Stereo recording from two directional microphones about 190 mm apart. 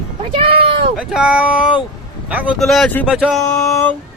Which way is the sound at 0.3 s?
30° right (ahead or behind).